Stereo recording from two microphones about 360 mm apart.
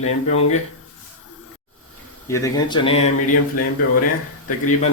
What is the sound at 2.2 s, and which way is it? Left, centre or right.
Speech, centre.